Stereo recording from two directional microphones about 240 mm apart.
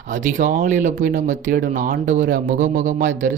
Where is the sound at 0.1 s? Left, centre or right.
Right.